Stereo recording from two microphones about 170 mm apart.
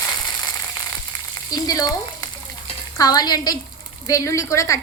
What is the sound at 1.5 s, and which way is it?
Frying, 20° left (ahead or behind).